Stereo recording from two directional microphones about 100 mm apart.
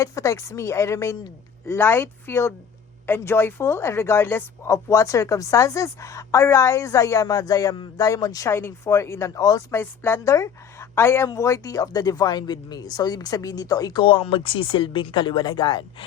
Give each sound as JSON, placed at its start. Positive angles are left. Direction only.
{"t": 0.0, "sound": "a woman's voice", "side_deg": 30}
{"t": 9.7, "sound": "a woman's voice", "side_deg": 20}